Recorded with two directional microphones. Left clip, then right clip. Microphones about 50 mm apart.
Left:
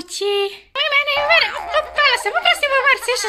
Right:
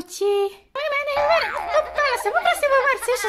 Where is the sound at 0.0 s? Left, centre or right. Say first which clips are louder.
Left 1 dB; right.